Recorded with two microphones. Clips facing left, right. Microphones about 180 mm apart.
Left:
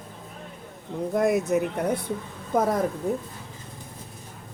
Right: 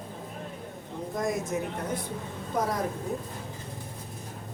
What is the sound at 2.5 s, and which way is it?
Speech, 50° left (ahead or behind).